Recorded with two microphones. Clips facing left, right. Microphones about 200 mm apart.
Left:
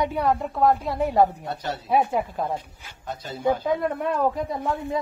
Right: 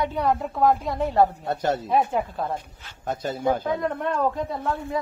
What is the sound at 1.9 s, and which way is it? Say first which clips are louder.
Speech: even; 5° left (ahead or behind).